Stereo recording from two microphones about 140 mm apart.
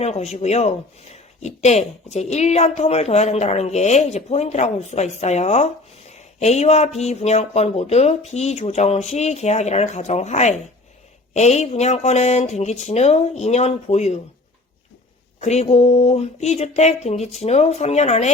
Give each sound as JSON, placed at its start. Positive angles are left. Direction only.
{"t": 0.0, "sound": "speech", "side_deg": 50}
{"t": 15.4, "sound": "speech", "side_deg": 50}